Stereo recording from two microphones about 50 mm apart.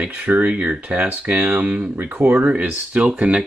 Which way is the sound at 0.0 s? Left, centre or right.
Right.